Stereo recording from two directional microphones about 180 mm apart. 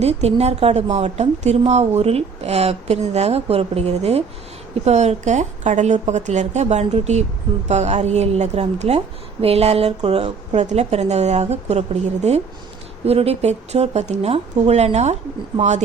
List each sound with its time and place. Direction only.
0.0 s a woman's voice: 35° right (ahead or behind)